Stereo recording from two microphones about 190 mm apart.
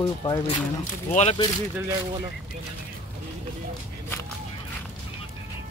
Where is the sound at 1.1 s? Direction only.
35° left (ahead or behind).